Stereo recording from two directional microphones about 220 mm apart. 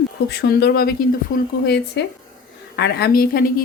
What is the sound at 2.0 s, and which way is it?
Speech, 50° left (ahead or behind).